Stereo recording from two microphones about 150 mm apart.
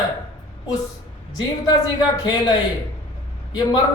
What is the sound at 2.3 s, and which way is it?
Speech, 30° left (ahead or behind).